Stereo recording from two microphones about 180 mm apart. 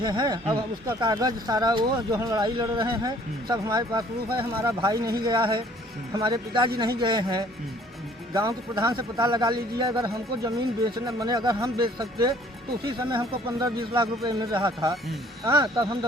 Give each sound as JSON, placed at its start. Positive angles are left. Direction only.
{"t": 0.0, "sound": "a man's voice", "side_deg": -25}